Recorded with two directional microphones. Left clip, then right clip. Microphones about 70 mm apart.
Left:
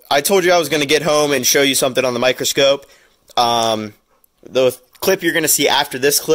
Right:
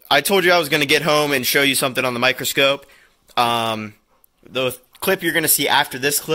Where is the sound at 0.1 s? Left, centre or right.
Left.